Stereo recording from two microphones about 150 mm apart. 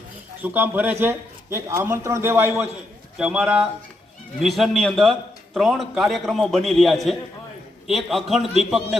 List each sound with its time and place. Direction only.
0.4 s a man's voice: 15° right (ahead or behind)
3.2 s a man's voice: 5° right (ahead or behind)